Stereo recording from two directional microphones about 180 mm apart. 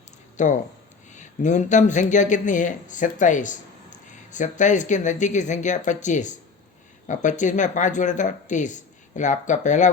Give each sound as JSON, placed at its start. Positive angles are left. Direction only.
{"t": 0.4, "sound": "speech", "side_deg": 45}